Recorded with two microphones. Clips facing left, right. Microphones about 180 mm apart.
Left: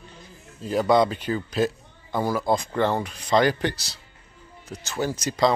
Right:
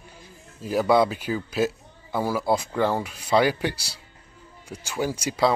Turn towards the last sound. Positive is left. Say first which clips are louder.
# left 1 dB
turn(degrees=-10)  # may be behind; listen again after turning